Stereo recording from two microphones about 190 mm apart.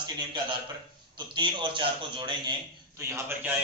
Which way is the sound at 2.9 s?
15° right (ahead or behind).